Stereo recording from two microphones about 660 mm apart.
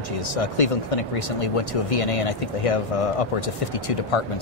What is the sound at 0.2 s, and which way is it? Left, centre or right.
Speech, left.